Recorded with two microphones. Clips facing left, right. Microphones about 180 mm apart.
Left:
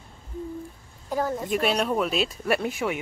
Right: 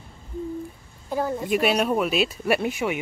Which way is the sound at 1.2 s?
10° right (ahead or behind).